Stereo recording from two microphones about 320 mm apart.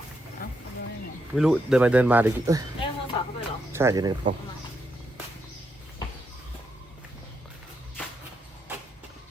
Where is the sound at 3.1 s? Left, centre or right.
Centre.